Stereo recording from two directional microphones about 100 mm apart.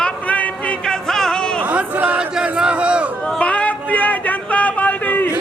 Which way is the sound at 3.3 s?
15° left (ahead or behind).